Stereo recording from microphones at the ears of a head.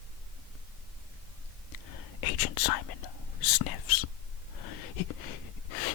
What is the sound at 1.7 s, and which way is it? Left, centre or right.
Whispering, left.